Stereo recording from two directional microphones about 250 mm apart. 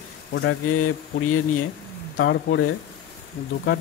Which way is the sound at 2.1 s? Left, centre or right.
Left.